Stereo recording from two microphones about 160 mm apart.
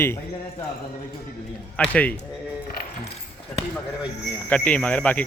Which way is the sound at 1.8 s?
10° left (ahead or behind).